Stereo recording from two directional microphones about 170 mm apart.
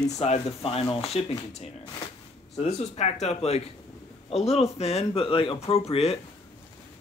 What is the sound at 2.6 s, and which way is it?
Speech, 40° left (ahead or behind).